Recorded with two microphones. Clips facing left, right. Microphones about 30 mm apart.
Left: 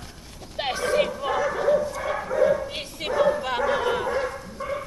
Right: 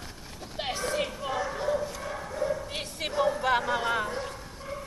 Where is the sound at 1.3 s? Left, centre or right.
Left.